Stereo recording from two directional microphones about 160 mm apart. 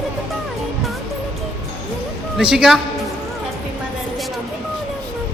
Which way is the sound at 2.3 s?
5° right (ahead or behind).